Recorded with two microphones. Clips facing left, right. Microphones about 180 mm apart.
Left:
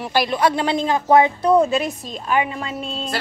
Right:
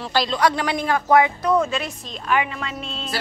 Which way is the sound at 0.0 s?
20° left (ahead or behind).